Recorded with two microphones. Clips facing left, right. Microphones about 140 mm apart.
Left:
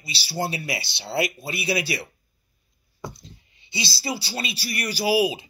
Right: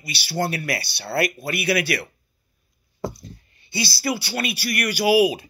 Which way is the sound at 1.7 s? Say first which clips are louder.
Right 3 dB; 60° right (ahead or behind).